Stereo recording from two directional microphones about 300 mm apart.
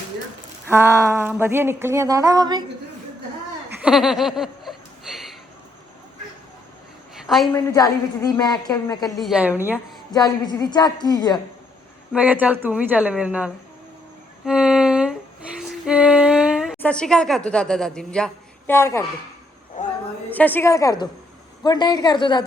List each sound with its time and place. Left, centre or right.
0.7 s speech: centre
3.8 s a sound: centre
7.2 s a woman's voice: centre
7.7 s a woman's voice: centre
9.0 s speech: centre
10.1 s a woman's voice: centre
12.1 s speech: centre
14.4 s a sound: centre
18.7 s a woman's voice: centre
19.8 s a sound: left
20.3 s a woman's voice: centre